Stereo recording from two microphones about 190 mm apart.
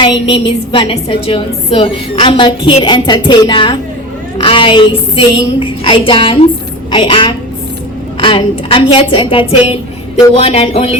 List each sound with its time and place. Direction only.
0.0 s a woman's voice: 25° left (ahead or behind)